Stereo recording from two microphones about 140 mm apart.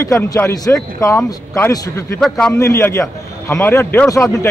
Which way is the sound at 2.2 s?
5° left (ahead or behind).